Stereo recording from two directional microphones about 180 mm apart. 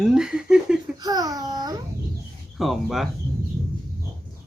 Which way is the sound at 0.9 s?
20° right (ahead or behind).